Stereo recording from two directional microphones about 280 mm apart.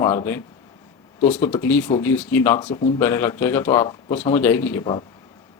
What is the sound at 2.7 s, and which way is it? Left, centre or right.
Speech, centre.